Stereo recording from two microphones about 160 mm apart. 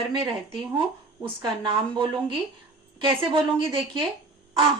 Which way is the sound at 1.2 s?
30° right (ahead or behind).